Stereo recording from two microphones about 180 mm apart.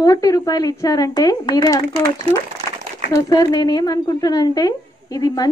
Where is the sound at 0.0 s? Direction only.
20° left (ahead or behind).